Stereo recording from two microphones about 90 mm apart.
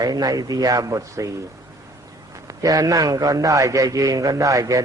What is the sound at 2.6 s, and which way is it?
A man's voice, 40° right (ahead or behind).